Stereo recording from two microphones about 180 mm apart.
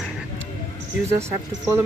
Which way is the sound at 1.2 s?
15° right (ahead or behind).